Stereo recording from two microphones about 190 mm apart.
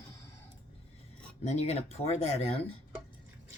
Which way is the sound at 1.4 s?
35° left (ahead or behind).